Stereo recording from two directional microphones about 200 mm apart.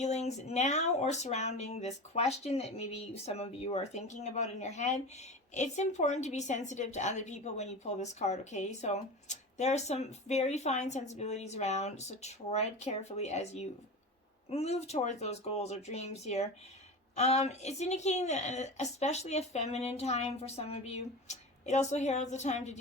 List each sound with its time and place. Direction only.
0.0 s a woman's voice: 35° left (ahead or behind)